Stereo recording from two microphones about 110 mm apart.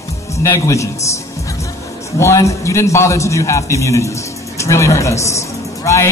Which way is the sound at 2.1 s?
25° left (ahead or behind).